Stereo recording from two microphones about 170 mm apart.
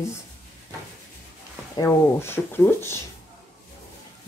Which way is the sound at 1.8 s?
15° left (ahead or behind).